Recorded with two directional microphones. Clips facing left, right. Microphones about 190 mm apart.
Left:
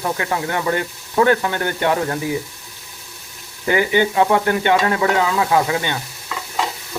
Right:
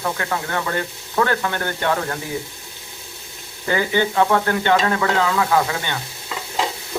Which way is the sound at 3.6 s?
15° left (ahead or behind).